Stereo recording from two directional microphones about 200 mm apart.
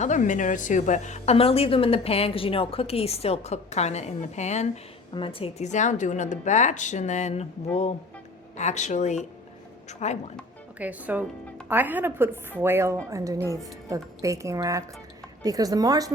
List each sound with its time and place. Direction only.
0.0 s a woman's voice: 40° left (ahead or behind)
8.5 s a woman's voice: 35° left (ahead or behind)
10.8 s a woman's voice: 10° right (ahead or behind)